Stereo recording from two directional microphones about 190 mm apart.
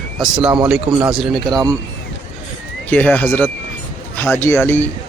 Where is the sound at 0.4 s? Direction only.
25° right (ahead or behind).